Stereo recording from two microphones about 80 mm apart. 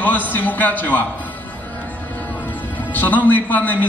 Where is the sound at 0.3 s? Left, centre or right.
Left.